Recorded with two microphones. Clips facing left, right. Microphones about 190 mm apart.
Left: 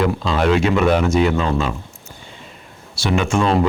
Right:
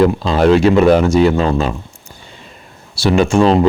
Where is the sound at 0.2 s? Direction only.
35° right (ahead or behind).